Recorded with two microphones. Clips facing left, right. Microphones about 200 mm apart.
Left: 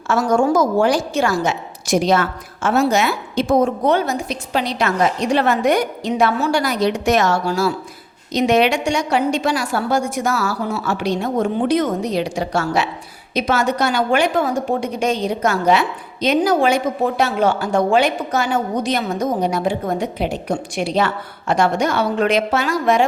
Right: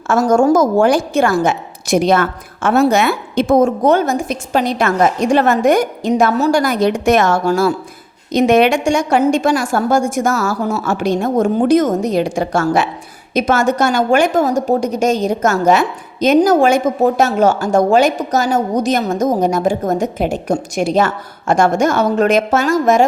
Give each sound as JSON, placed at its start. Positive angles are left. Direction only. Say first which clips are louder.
{"t": 0.1, "sound": "a woman's voice", "louder": "right 4 dB", "side_deg": -45}